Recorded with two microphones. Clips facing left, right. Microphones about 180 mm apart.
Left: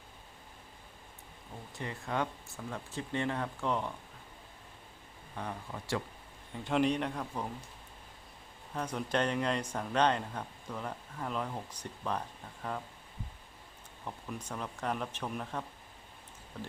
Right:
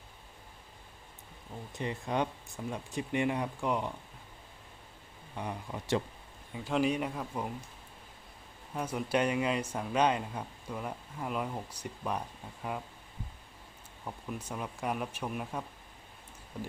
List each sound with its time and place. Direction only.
1.7 s speech: 20° right (ahead or behind)
5.3 s speech: 15° right (ahead or behind)
6.5 s speech: 5° right (ahead or behind)
8.7 s speech: 10° right (ahead or behind)
14.0 s speech: 5° right (ahead or behind)